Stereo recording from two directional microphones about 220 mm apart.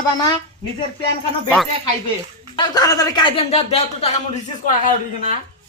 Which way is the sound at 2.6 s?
15° left (ahead or behind).